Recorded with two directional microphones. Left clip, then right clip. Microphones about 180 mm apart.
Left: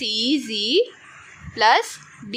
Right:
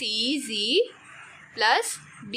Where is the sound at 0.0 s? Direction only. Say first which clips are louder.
Left 5 dB; 20° left (ahead or behind).